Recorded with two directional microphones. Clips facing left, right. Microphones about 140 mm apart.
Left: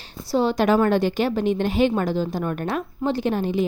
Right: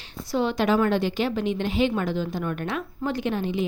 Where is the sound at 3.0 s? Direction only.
30° left (ahead or behind).